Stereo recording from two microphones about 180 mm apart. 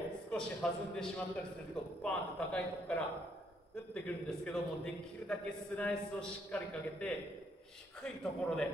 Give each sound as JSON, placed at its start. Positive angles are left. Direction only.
{"t": 0.3, "sound": "a man's voice", "side_deg": 5}